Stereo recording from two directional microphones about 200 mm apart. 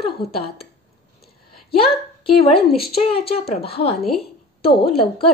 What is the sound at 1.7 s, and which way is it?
A woman's voice, 30° left (ahead or behind).